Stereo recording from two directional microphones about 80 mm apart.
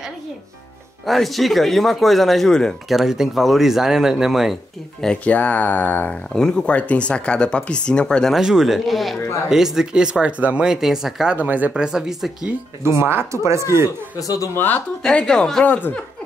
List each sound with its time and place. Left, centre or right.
1.0 s speech: centre
3.0 s speech: centre
5.0 s speech: centre
6.3 s speech: centre
8.4 s speech: centre
11.3 s speech: right
11.8 s speech: centre
12.8 s speech: right
14.2 s speech: left
14.5 s speech: left
15.0 s speech: centre
15.6 s speech: left